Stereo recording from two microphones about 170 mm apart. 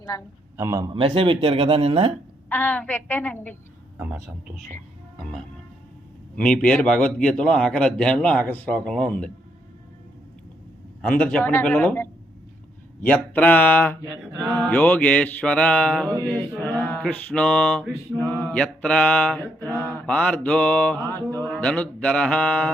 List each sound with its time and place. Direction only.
0.1 s a man's voice: 20° left (ahead or behind)
0.5 s a man's voice: 20° right (ahead or behind)
0.9 s speech: 30° right (ahead or behind)
2.5 s mantra: 10° left (ahead or behind)
3.9 s speech: 10° right (ahead or behind)
6.3 s a man's voice: 5° left (ahead or behind)
11.0 s mantra: 5° left (ahead or behind)
18.3 s a man's voice: 10° left (ahead or behind)
19.8 s mantra: 10° left (ahead or behind)
21.4 s a man's voice: 5° left (ahead or behind)